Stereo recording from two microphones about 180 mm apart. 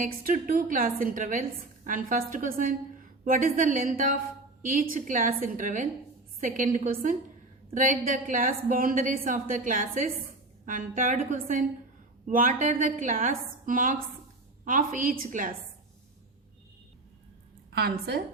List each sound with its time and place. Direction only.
0.0 s a woman's voice: 50° right (ahead or behind)
17.7 s a woman's voice: 65° right (ahead or behind)